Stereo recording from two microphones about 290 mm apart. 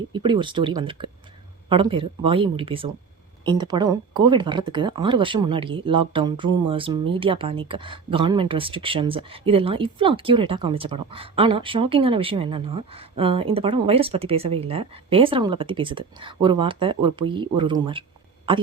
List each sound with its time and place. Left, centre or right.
0.1 s speech: centre